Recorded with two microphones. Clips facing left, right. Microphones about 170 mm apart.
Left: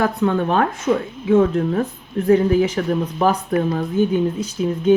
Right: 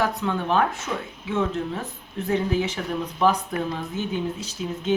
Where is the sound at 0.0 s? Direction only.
55° left (ahead or behind).